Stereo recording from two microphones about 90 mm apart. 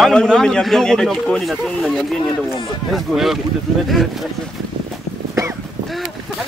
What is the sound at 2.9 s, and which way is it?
A man's voice, centre (ahead or behind).